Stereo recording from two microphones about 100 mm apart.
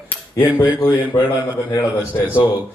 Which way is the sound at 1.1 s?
30° left (ahead or behind).